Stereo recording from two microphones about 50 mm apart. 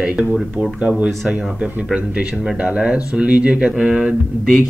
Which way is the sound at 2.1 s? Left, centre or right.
Right.